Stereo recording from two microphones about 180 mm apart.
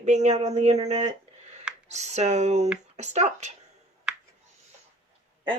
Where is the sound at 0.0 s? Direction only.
40° right (ahead or behind).